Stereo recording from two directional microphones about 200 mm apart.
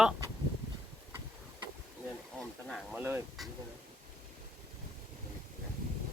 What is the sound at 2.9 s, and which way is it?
Honk, 10° right (ahead or behind).